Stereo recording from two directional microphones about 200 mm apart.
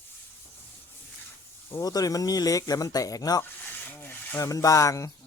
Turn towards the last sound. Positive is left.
turn(degrees=15)  # may be behind; listen again after turning